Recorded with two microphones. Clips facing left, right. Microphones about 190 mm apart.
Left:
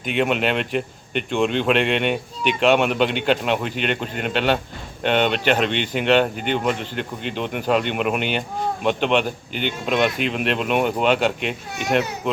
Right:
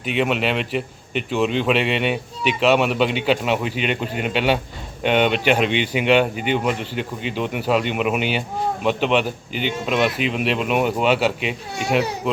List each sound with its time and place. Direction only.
0.0 s speech: centre (ahead or behind)